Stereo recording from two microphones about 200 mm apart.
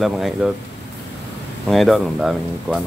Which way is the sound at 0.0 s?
5° right (ahead or behind).